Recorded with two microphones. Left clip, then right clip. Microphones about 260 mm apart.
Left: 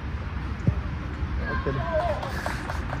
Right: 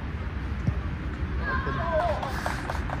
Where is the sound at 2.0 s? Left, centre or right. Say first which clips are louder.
Even; right.